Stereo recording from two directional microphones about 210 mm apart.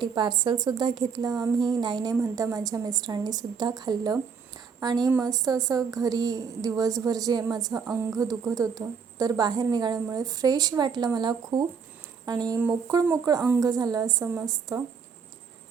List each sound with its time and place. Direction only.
0.0 s a woman's voice: 20° right (ahead or behind)